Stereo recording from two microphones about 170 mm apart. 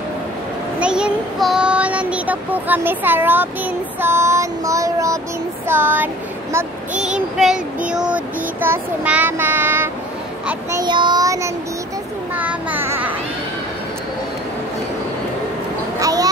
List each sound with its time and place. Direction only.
0.7 s child singing: 5° right (ahead or behind)
5.7 s a sound: 10° right (ahead or behind)
6.5 s speech: 10° right (ahead or behind)
7.3 s child singing: 5° right (ahead or behind)
10.8 s child singing: 25° right (ahead or behind)
16.0 s a sound: 20° right (ahead or behind)